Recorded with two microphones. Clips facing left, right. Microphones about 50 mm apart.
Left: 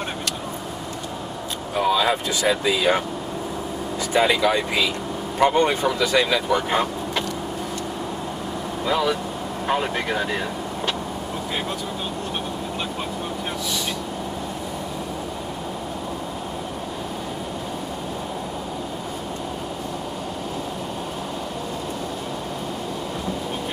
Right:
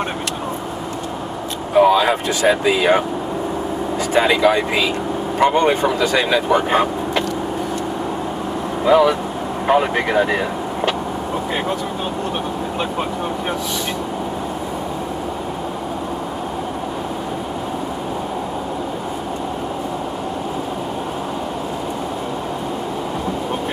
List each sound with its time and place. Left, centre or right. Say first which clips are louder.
1.8 s speech: right 7 dB; right
4.1 s speech: right 4 dB; right
8.8 s speech: right 9 dB; right